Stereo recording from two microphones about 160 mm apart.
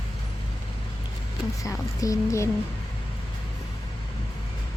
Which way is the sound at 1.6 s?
20° left (ahead or behind).